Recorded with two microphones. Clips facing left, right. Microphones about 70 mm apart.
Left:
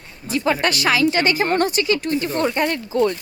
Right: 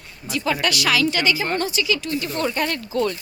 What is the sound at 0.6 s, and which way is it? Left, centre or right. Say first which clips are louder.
Speech: left 1 dB; left.